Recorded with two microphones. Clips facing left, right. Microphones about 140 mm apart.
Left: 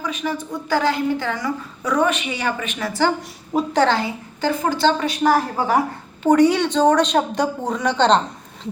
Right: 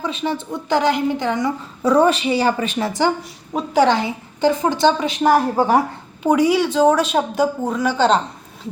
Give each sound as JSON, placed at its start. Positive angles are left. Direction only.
{"t": 0.0, "sound": "a woman's voice", "side_deg": -30}
{"t": 3.5, "sound": "a woman's voice", "side_deg": -10}
{"t": 6.2, "sound": "a woman's voice", "side_deg": -10}